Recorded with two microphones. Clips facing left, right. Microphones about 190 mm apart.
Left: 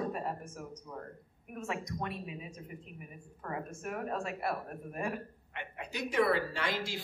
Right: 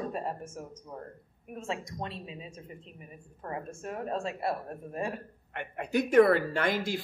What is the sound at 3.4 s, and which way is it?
A woman's voice, 25° right (ahead or behind).